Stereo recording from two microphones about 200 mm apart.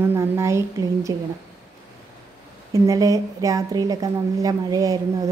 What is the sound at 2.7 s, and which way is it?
A woman's voice, 15° right (ahead or behind).